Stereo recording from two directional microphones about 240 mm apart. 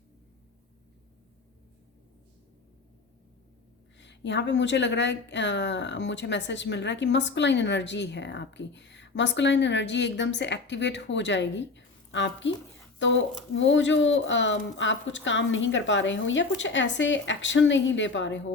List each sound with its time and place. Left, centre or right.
3.9 s a woman's voice: left